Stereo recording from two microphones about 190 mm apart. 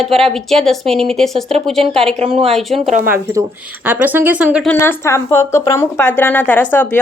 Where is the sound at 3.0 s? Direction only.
10° right (ahead or behind).